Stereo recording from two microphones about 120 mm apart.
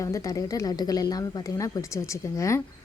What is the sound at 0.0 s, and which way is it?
A woman's voice, 25° left (ahead or behind).